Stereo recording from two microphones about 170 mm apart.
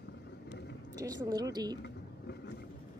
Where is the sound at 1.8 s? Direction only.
85° left.